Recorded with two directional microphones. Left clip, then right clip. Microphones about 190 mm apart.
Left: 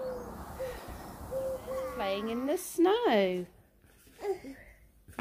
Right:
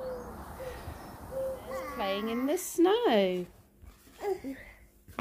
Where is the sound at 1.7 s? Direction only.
35° right (ahead or behind).